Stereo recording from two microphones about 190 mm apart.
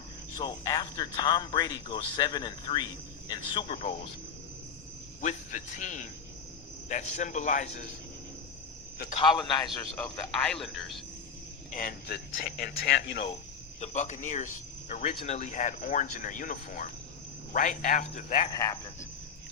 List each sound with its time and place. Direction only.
0.3 s speech: 20° left (ahead or behind)
5.2 s speech: 40° left (ahead or behind)
9.1 s speech: 25° left (ahead or behind)
10.0 s a man's voice: 5° left (ahead or behind)
11.7 s speech: 45° left (ahead or behind); by 13.2 s 65° left (ahead or behind)
13.7 s speech: 35° left (ahead or behind)
18.5 s speech: 20° left (ahead or behind)